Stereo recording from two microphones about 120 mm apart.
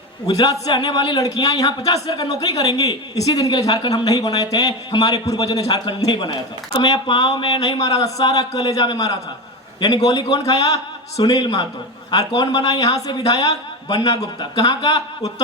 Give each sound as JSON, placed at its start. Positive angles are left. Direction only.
{"t": 0.3, "sound": "a man's voice", "side_deg": 30}